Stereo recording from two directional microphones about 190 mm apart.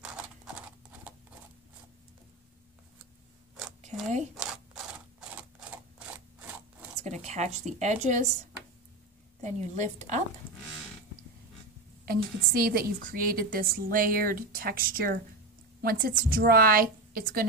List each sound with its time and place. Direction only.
0.0 s clip-clop: 5° right (ahead or behind)
4.4 s scissors: 5° right (ahead or behind)
7.0 s a woman's voice: 35° right (ahead or behind)
9.4 s a woman's voice: 40° right (ahead or behind)
12.1 s a woman's voice: 50° right (ahead or behind)